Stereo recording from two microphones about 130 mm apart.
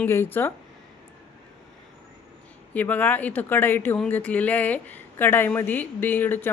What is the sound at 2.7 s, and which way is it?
Speech, 10° left (ahead or behind).